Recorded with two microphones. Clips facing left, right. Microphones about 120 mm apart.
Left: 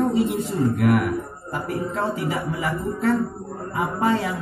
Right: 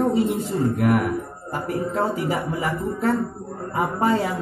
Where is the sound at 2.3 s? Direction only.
35° right (ahead or behind).